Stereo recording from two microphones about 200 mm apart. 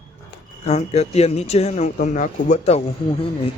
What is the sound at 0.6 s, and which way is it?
Speech, 30° left (ahead or behind).